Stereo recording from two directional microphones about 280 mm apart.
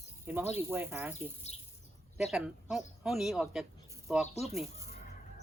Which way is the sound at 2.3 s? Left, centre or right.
Centre.